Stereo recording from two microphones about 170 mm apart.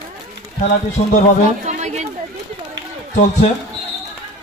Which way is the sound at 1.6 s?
45° right (ahead or behind).